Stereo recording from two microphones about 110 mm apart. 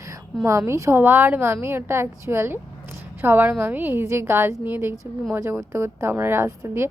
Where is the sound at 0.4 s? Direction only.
25° right (ahead or behind).